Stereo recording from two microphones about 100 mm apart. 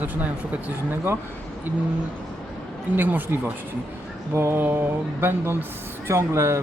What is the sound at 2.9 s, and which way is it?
Speech, 20° right (ahead or behind).